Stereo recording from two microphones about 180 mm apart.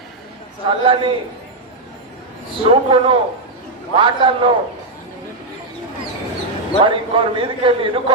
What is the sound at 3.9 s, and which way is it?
Speech, 30° right (ahead or behind).